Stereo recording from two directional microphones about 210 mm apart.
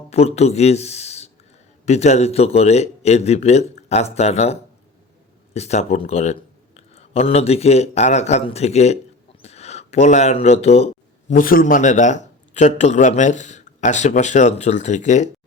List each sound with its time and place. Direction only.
0.1 s a man's voice: 30° left (ahead or behind)
5.5 s a man's voice: 30° left (ahead or behind)
11.3 s a man's voice: 40° left (ahead or behind)